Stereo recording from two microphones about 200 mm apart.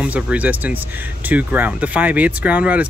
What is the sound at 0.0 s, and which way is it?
Speech, 5° right (ahead or behind).